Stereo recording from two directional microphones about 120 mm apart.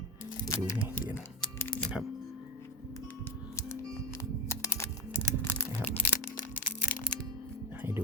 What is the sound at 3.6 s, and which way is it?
Music, 25° left (ahead or behind).